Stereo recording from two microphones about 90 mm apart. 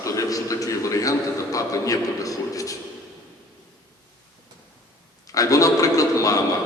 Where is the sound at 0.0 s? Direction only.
40° left (ahead or behind).